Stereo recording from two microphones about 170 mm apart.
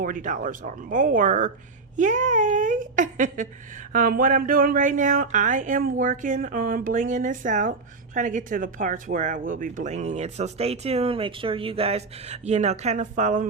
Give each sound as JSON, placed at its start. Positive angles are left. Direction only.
{"t": 0.0, "sound": "speech", "side_deg": -50}